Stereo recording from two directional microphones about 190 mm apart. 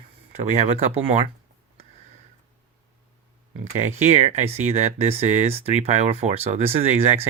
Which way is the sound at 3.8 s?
35° right (ahead or behind).